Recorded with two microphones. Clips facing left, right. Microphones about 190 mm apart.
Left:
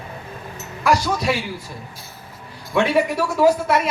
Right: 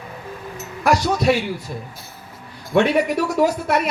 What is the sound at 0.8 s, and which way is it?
Speech, 60° right (ahead or behind).